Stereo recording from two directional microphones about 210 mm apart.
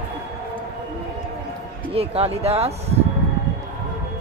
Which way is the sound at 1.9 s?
30° right (ahead or behind).